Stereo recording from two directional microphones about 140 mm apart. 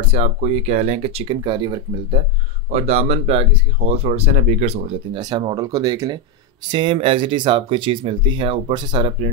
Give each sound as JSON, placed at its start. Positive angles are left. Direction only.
{"t": 0.1, "sound": "speech", "side_deg": -45}
{"t": 2.7, "sound": "speech", "side_deg": -50}
{"t": 5.2, "sound": "speech", "side_deg": -30}